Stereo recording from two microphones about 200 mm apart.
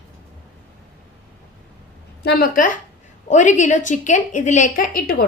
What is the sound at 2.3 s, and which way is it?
A woman's voice, 50° left (ahead or behind).